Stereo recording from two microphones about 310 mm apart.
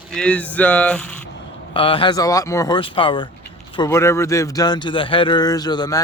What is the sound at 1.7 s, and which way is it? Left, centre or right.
Speech, centre.